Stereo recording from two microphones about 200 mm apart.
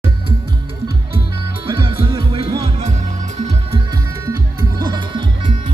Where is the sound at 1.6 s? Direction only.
25° right (ahead or behind).